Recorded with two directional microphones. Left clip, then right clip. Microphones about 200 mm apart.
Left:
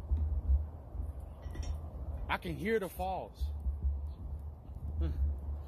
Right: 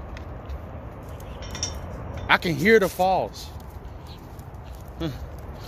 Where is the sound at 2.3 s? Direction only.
20° right (ahead or behind).